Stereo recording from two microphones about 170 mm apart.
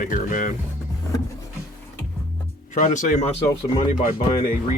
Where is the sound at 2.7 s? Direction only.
45° left (ahead or behind).